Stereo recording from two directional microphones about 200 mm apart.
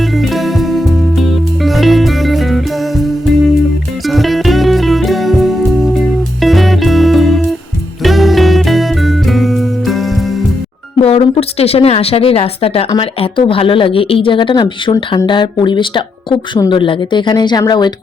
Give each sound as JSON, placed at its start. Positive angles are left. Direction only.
{"t": 0.0, "sound": "music", "side_deg": 0}
{"t": 11.0, "sound": "speech", "side_deg": 30}